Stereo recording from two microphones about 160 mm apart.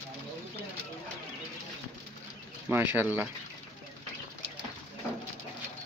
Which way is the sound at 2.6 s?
10° right (ahead or behind).